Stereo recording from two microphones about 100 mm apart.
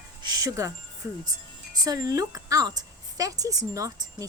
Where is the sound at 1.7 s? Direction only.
40° right (ahead or behind).